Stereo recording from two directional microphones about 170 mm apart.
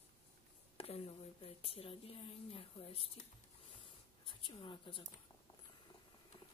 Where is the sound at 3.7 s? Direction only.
30° left (ahead or behind).